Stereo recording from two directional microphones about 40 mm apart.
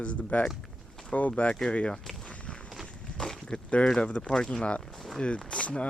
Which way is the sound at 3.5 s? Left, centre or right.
Left.